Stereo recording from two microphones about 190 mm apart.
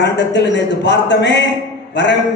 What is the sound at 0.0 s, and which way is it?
A man's voice, 65° left (ahead or behind).